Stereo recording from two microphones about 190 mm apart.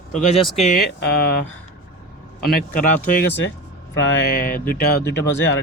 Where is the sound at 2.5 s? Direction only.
45° left (ahead or behind).